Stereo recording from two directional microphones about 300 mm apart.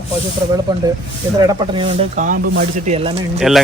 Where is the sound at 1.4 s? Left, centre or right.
Centre.